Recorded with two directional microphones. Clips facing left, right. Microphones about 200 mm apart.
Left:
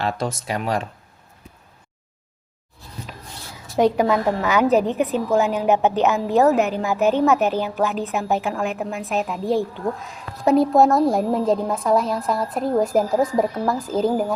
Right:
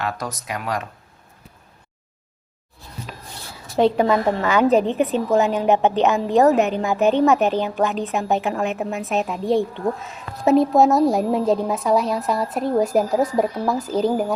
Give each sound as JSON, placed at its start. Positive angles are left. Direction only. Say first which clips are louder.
{"t": 0.0, "sound": "speech", "louder": "left 3 dB", "side_deg": 25}
{"t": 3.8, "sound": "a woman's voice", "louder": "right 1 dB", "side_deg": 10}